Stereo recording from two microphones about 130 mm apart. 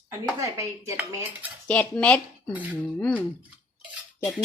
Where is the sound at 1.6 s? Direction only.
10° left (ahead or behind).